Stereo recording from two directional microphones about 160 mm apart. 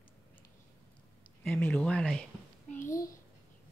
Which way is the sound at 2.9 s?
20° left (ahead or behind).